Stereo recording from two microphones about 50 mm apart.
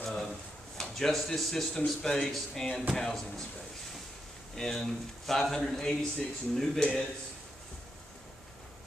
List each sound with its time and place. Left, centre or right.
0.0 s drawer open or close: centre
0.7 s speech: centre
4.6 s speech: centre
6.8 s a man's voice: left